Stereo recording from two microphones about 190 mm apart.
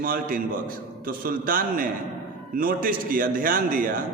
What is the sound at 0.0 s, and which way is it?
A man's voice, 45° right (ahead or behind).